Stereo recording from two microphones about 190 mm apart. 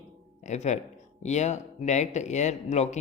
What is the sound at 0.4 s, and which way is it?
Speech, 35° left (ahead or behind).